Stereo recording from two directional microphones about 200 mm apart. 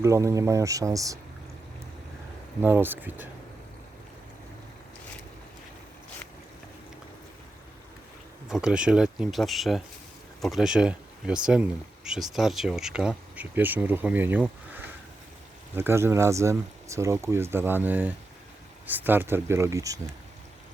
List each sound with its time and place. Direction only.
0.0 s speech: 15° right (ahead or behind)
2.6 s speech: 10° right (ahead or behind)
8.4 s speech: 5° right (ahead or behind)